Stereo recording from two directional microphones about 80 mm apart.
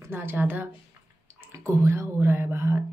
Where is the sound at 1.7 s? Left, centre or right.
Right.